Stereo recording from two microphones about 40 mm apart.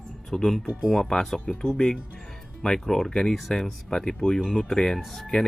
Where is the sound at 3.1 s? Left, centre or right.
Centre.